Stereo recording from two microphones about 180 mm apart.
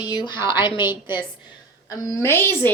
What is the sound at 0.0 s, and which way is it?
A woman's voice, 25° left (ahead or behind).